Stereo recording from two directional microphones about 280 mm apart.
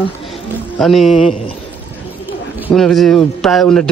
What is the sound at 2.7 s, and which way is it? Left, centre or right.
A man's voice, centre.